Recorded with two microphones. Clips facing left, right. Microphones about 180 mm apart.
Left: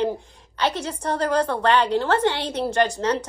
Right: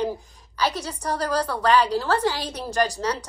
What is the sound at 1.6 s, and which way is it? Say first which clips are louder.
A woman's voice: left 1 dB; 25° left (ahead or behind).